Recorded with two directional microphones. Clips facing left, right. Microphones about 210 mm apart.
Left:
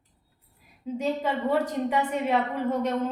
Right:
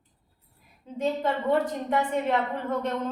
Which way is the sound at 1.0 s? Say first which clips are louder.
Right 1 dB; 10° left (ahead or behind).